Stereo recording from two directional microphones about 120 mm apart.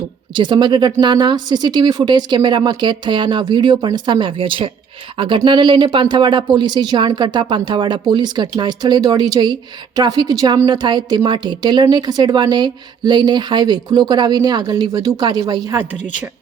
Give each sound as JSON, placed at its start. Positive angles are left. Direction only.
{"t": 0.3, "sound": "a woman's voice", "side_deg": -40}